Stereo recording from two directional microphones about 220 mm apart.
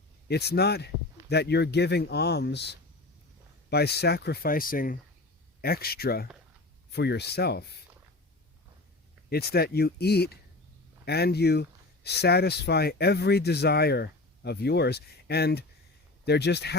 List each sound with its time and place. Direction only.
0.3 s speech: 50° left (ahead or behind)
9.3 s speech: 45° left (ahead or behind)